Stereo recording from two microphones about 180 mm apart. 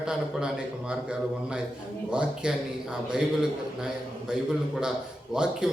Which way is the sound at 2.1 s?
5° right (ahead or behind).